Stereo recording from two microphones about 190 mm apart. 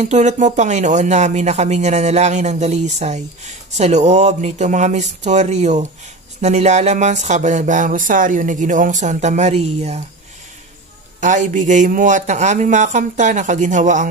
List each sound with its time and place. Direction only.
0.0 s speech: 40° right (ahead or behind)
11.1 s speech: 40° right (ahead or behind)